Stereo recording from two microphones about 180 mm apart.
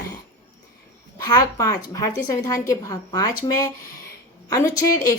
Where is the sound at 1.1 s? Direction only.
20° left (ahead or behind).